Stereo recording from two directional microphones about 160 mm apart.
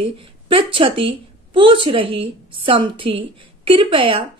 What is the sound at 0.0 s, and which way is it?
A woman's voice, 35° right (ahead or behind).